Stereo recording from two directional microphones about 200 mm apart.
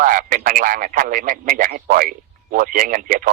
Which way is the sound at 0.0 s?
40° right (ahead or behind).